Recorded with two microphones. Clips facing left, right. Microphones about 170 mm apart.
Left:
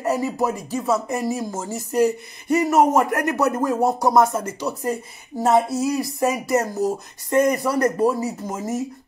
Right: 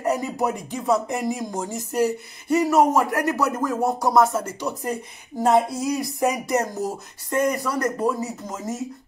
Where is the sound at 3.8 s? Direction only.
30° left (ahead or behind).